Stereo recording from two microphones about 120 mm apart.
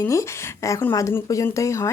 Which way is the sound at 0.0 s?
25° left (ahead or behind).